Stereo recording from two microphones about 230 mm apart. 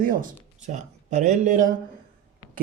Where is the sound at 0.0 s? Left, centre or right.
Right.